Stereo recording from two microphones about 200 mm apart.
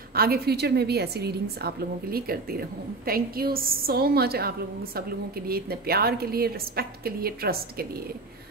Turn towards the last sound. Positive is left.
turn(degrees=-50)  # may be behind; listen again after turning